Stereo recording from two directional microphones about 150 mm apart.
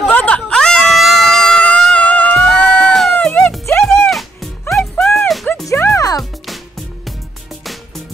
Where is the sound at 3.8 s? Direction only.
Centre (ahead or behind).